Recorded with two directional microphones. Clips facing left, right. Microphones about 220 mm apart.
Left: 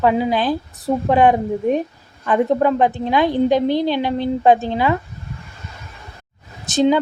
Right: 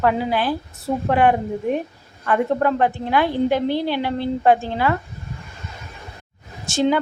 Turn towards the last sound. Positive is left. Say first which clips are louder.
# left 4 dB
turn(degrees=20)  # may be behind; listen again after turning